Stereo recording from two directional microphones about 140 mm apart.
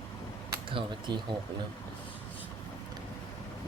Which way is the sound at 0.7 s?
35° right (ahead or behind).